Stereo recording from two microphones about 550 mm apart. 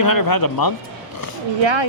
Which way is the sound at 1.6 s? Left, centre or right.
Right.